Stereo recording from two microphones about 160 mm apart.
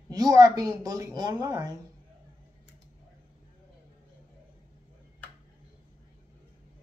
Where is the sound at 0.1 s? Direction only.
25° right (ahead or behind).